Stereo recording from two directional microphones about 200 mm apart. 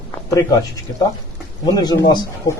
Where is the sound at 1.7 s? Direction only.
20° left (ahead or behind).